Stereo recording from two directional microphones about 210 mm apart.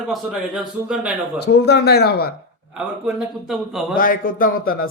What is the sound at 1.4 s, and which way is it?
Speech, 50° left (ahead or behind).